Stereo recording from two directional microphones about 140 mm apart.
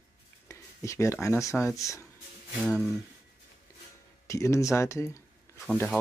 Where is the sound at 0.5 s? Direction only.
20° left (ahead or behind).